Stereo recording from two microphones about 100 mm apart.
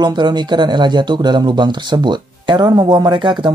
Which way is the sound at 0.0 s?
50° right (ahead or behind).